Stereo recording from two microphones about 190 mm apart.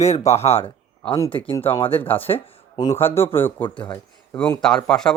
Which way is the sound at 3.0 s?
10° left (ahead or behind).